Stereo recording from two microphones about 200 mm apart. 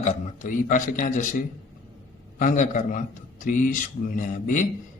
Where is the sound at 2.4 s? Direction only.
40° left (ahead or behind).